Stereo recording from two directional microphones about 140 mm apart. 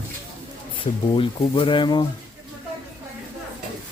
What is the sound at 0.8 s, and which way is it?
Speech, 40° left (ahead or behind).